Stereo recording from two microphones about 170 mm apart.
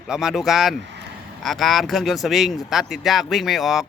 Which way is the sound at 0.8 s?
90° right.